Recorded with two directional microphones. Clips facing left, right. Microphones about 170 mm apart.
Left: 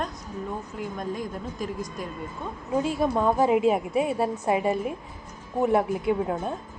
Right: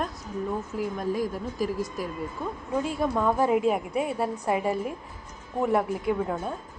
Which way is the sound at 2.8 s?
20° left (ahead or behind).